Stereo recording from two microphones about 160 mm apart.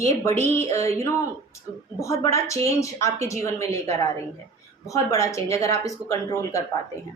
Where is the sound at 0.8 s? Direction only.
40° right (ahead or behind).